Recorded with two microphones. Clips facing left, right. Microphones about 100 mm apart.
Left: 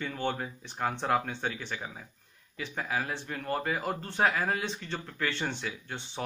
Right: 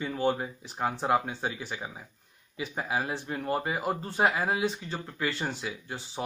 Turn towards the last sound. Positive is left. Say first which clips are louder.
# right 2 dB
turn(degrees=-5)  # may be behind; listen again after turning